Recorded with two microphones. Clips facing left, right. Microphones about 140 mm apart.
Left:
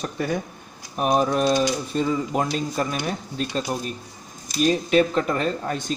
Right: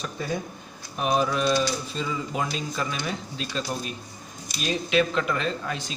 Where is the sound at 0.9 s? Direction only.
45° left (ahead or behind).